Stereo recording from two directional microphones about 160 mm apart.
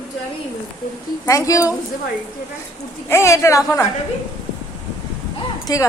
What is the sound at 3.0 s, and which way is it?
Speech, 15° left (ahead or behind).